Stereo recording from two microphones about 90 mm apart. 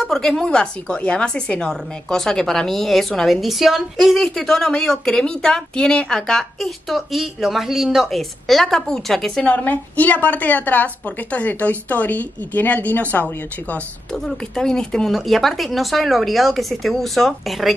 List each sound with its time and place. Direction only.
0.0 s speech: 5° left (ahead or behind)
9.5 s a woman's voice: 15° left (ahead or behind)
14.1 s speech: 5° left (ahead or behind)